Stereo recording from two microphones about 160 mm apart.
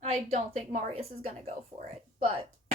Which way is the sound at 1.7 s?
25° right (ahead or behind).